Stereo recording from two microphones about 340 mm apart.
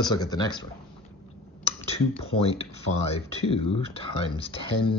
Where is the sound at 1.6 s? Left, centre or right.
Centre.